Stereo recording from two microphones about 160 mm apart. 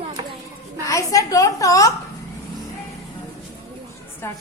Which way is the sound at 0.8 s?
20° left (ahead or behind).